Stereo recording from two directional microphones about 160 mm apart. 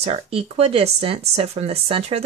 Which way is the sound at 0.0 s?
35° right (ahead or behind).